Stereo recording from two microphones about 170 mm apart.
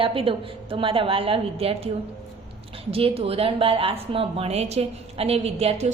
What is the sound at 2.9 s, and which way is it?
A woman's voice, 35° right (ahead or behind).